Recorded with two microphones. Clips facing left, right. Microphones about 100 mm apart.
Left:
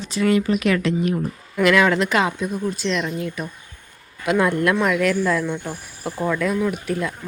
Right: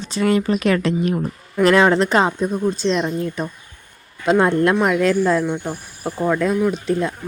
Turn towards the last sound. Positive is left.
turn(degrees=-25)  # may be behind; listen again after turning